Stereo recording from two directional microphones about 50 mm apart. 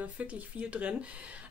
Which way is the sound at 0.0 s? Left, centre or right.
Right.